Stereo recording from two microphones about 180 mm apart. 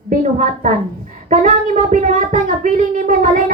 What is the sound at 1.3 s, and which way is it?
A child's voice, 45° right (ahead or behind).